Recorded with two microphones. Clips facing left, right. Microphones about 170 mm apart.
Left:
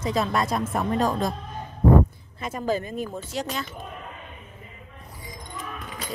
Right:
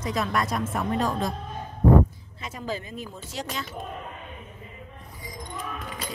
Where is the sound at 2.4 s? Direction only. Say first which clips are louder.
Left 6 dB; 50° left (ahead or behind).